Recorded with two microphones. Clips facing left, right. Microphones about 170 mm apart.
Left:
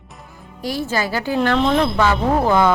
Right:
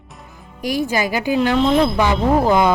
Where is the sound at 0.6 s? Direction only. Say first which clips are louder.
Right 2 dB; 15° right (ahead or behind).